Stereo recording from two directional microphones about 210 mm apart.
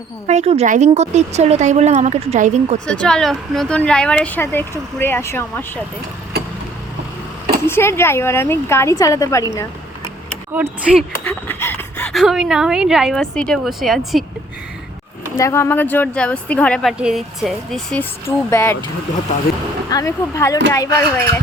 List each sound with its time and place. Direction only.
0.3 s a woman's voice: 30° right (ahead or behind)
2.8 s speech: 5° left (ahead or behind)
7.7 s a woman's voice: 10° left (ahead or behind)
10.5 s speech: 5° right (ahead or behind)
11.2 s speech: 10° left (ahead or behind)
15.4 s speech: 15° left (ahead or behind)
18.3 s a woman's voice: 10° left (ahead or behind)
19.9 s a woman's voice: 15° left (ahead or behind)